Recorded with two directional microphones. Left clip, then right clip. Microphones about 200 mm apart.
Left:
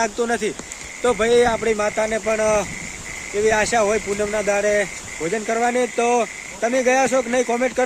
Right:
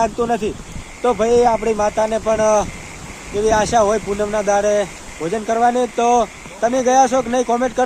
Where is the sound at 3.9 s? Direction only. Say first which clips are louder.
Right 2 dB; 15° left (ahead or behind).